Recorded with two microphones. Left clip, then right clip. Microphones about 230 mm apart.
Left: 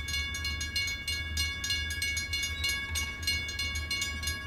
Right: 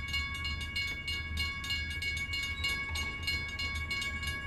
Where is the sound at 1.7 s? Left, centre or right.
Left.